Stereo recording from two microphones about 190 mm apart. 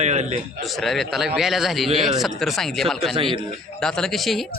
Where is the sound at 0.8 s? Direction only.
Centre (ahead or behind).